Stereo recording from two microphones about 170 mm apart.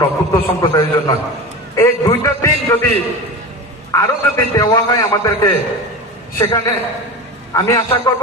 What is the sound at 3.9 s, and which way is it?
A man's voice, 15° left (ahead or behind).